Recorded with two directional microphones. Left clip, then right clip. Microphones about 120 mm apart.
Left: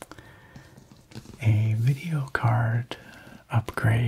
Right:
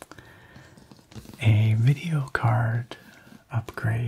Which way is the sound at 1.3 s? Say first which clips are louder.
Right 4 dB; 15° right (ahead or behind).